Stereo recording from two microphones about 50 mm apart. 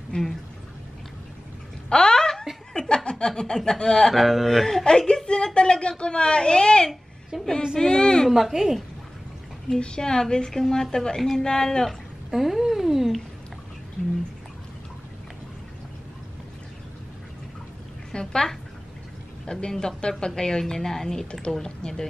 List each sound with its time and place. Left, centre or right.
0.1 s speech: left
1.9 s a sound: centre
2.7 s a woman's voice: centre
4.1 s a woman's voice: centre
7.3 s speech: centre
7.7 s a woman's voice: centre
8.3 s speech: centre
9.7 s a woman's voice: centre
12.3 s cat: centre
18.1 s a sound: centre
19.4 s a woman's voice: centre